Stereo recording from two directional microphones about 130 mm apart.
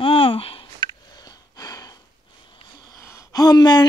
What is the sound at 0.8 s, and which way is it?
Sniff, 30° left (ahead or behind).